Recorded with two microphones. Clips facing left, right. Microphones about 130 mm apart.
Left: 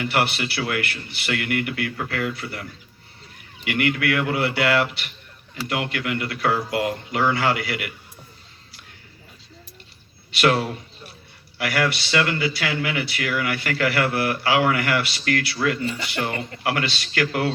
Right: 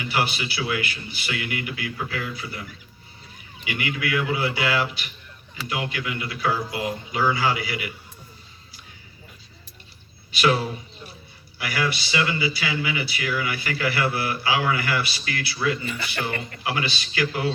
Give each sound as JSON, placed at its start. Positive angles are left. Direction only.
{"t": 0.0, "sound": "a man's voice", "side_deg": 65}
{"t": 10.3, "sound": "speech", "side_deg": 65}